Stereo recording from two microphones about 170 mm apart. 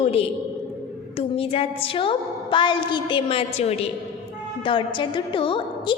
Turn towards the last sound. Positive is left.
turn(degrees=30)  # may be behind; listen again after turning